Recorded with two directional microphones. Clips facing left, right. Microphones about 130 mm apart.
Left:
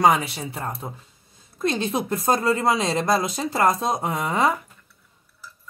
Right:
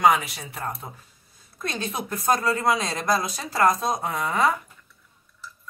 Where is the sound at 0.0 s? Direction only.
35° left (ahead or behind).